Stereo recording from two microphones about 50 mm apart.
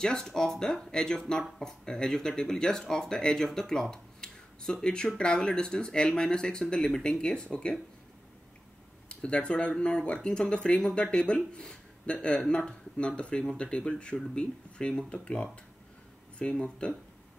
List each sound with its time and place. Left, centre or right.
0.0 s speech: centre
3.9 s a sound: centre
4.8 s speech: centre
9.1 s speech: left